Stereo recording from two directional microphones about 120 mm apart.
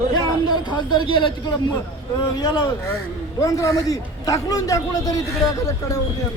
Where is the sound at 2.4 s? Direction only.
35° left (ahead or behind).